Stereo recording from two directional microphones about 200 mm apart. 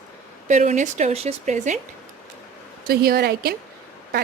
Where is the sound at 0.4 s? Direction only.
35° right (ahead or behind).